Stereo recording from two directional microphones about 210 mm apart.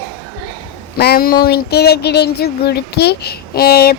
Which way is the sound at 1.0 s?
45° left (ahead or behind).